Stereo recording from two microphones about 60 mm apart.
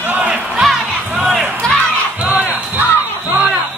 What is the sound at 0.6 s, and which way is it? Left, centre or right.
Battle cry, centre.